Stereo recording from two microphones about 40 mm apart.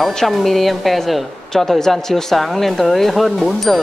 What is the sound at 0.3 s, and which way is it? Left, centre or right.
A woman's voice, centre.